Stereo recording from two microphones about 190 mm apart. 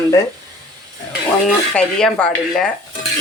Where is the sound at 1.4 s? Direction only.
5° left (ahead or behind).